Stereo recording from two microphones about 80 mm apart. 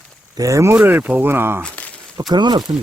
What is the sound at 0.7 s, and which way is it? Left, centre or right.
Speech, right.